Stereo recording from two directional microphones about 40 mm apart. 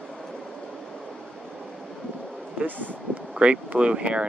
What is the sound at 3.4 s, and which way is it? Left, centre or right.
Speech, right.